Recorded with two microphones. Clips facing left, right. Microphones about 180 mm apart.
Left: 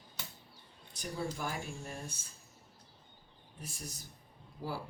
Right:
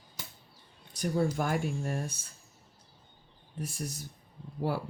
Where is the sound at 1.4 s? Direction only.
60° right (ahead or behind).